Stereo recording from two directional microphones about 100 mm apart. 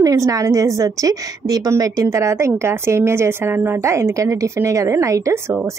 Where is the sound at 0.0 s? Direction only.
35° right (ahead or behind).